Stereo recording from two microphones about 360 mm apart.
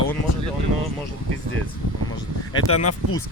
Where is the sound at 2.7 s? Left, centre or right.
Left.